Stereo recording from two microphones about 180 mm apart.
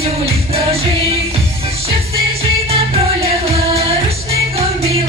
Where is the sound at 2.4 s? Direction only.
35° right (ahead or behind).